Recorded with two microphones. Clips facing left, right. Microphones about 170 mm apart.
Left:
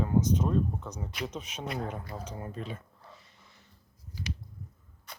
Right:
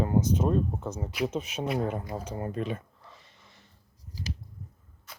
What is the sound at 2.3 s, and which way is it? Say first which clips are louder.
Speech: right 9 dB; 60° right (ahead or behind).